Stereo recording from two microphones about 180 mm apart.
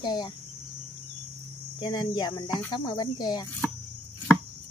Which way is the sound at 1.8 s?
25° left (ahead or behind).